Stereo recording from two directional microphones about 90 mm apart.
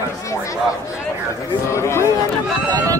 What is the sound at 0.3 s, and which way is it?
Speech, 35° left (ahead or behind).